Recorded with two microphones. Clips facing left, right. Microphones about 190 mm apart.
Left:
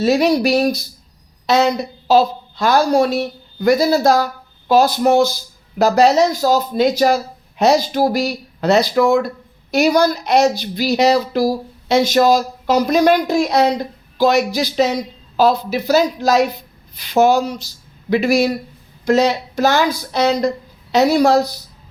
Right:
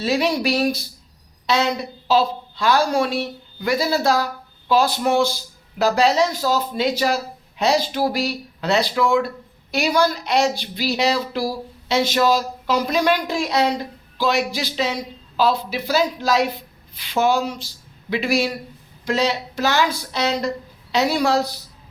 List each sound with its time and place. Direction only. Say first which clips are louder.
0.0 s a woman's voice: left 6 dB; 45° left (ahead or behind)